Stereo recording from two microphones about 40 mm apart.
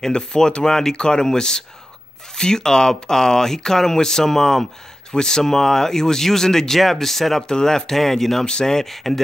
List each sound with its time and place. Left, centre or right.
0.0 s speech: centre
7.4 s speech: centre
8.5 s speech: centre